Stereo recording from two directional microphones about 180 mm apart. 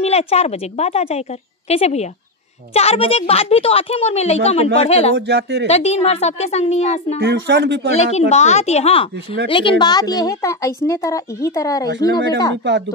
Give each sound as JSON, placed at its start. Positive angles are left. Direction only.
{"t": 0.0, "sound": "speech", "side_deg": 35}
{"t": 5.1, "sound": "speech", "side_deg": -75}
{"t": 5.7, "sound": "speech", "side_deg": 35}
{"t": 7.2, "sound": "speech", "side_deg": -65}
{"t": 7.9, "sound": "a woman's voice", "side_deg": 35}